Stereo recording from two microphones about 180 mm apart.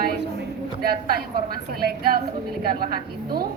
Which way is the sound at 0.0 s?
60° right (ahead or behind).